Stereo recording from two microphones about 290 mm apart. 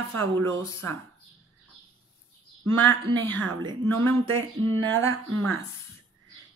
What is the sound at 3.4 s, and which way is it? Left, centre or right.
Speech, right.